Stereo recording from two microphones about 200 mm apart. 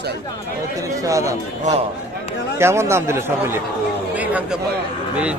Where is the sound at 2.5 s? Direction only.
15° right (ahead or behind).